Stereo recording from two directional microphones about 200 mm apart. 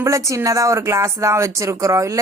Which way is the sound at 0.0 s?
15° right (ahead or behind).